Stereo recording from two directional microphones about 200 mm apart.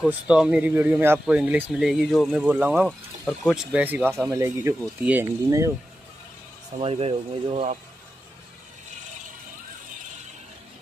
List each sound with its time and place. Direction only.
0.0 s speech: 5° right (ahead or behind)
6.8 s speech: 30° right (ahead or behind)